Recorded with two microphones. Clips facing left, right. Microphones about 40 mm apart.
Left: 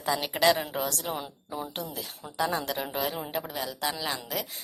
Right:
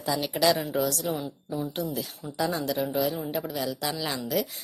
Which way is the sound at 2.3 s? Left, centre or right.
Left.